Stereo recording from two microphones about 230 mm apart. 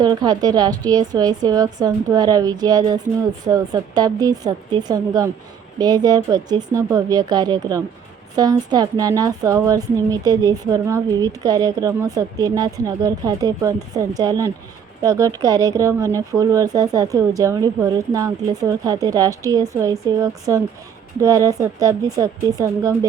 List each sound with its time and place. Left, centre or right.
0.0 s a woman's voice: centre